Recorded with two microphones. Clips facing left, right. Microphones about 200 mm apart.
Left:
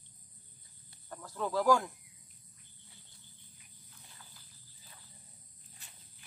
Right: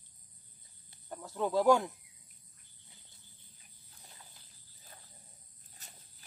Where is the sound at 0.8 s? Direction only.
20° right (ahead or behind).